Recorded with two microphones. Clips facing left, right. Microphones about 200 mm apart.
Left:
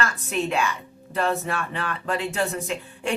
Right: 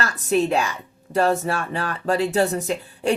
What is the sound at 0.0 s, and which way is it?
Speech, 40° right (ahead or behind).